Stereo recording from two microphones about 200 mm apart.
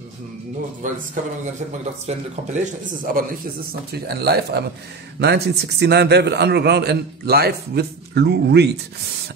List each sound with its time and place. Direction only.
0.8 s speech: 40° right (ahead or behind)
2.0 s speech: 35° right (ahead or behind)
3.9 s a man's voice: 50° right (ahead or behind)